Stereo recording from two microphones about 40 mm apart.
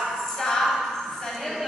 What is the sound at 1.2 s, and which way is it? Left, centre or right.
Music, centre.